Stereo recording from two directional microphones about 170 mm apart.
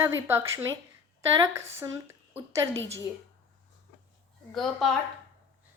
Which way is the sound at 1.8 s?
15° right (ahead or behind).